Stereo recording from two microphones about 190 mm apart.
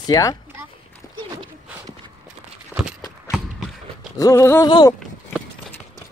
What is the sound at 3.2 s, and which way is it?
Run, centre (ahead or behind).